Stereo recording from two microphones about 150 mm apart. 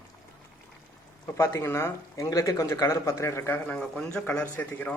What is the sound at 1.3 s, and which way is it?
Speech, 15° left (ahead or behind).